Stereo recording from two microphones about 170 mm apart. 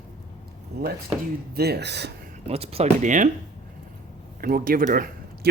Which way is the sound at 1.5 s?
70° right (ahead or behind).